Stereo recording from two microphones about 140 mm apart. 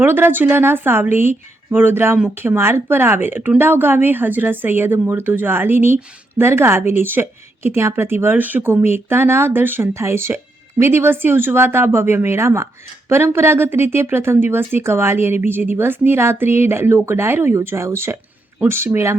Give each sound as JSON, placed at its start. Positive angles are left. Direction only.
{"t": 0.0, "sound": "a woman's voice", "side_deg": -15}